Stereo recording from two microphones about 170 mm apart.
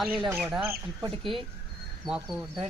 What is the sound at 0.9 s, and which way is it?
Speech, 25° right (ahead or behind).